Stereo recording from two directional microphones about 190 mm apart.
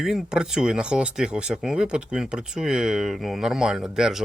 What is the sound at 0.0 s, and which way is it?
Speech, 5° right (ahead or behind).